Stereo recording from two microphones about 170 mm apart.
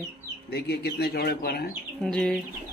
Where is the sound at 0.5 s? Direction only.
70° left (ahead or behind).